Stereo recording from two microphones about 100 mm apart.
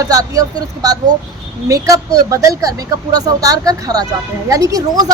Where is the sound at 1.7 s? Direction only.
35° right (ahead or behind).